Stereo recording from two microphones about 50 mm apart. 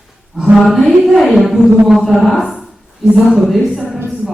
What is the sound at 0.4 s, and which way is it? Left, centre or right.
Speech, centre.